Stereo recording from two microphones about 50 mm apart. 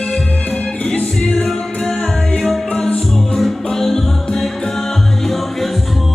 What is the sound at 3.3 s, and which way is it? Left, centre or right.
Music, centre.